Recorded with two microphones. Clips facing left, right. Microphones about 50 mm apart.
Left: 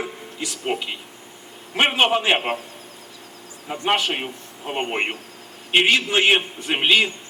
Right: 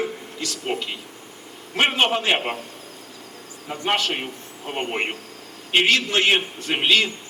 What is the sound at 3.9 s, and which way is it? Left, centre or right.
A man's voice, centre.